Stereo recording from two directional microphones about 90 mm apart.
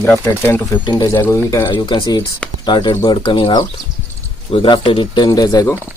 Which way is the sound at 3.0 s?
70° left (ahead or behind).